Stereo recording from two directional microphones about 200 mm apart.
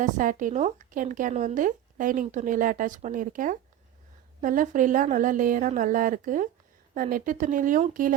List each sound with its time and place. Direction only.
0.0 s speech: 40° right (ahead or behind)